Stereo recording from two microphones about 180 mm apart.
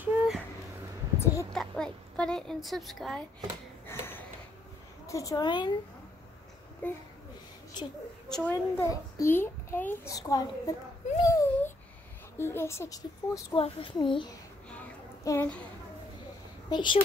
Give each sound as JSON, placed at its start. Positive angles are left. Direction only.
{"t": 0.0, "sound": "a sound", "side_deg": -10}
{"t": 1.5, "sound": "a woman's voice", "side_deg": 5}
{"t": 3.8, "sound": "a sound", "side_deg": 10}
{"t": 5.0, "sound": "a woman's voice", "side_deg": 20}
{"t": 6.8, "sound": "a child's voice", "side_deg": 10}
{"t": 7.8, "sound": "a woman's voice", "side_deg": 25}
{"t": 8.3, "sound": "a child's voice", "side_deg": 10}
{"t": 11.2, "sound": "a sound", "side_deg": 15}
{"t": 12.4, "sound": "a child's voice", "side_deg": 15}
{"t": 13.6, "sound": "a woman's voice", "side_deg": 30}
{"t": 15.2, "sound": "a child's voice", "side_deg": 15}
{"t": 16.6, "sound": "speech", "side_deg": 25}